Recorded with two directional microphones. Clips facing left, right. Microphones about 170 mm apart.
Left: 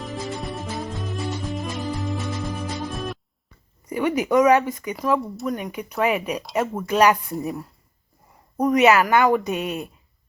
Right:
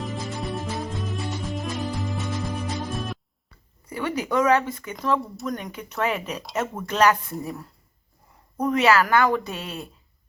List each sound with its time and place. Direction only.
0.0 s music: centre (ahead or behind)
3.8 s a woman's voice: 15° left (ahead or behind)
5.2 s speech: centre (ahead or behind)
5.5 s a woman's voice: 10° left (ahead or behind)
6.4 s a woman's voice: centre (ahead or behind); by 9.9 s 15° left (ahead or behind)